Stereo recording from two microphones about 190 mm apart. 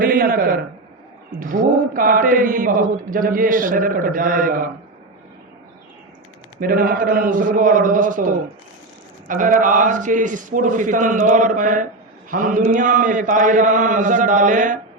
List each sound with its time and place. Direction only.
0.0 s a man's voice: 50° right (ahead or behind)
1.4 s mantra: 45° right (ahead or behind)
6.6 s mantra: 50° right (ahead or behind)